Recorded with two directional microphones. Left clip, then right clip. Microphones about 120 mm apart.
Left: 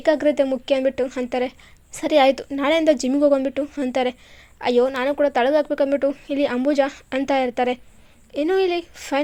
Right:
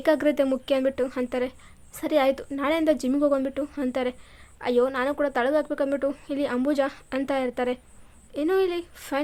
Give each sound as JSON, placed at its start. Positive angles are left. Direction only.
{"t": 0.0, "sound": "a woman's voice", "side_deg": 0}